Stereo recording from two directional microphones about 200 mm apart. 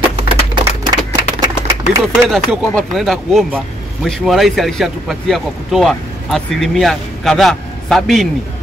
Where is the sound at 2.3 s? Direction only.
Centre (ahead or behind).